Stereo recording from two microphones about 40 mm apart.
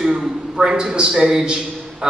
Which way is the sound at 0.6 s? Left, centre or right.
Centre.